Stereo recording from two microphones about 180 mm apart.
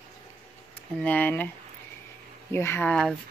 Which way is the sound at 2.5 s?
15° left (ahead or behind).